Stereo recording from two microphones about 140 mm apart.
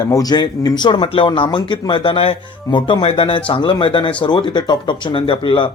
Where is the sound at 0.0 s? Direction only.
25° left (ahead or behind).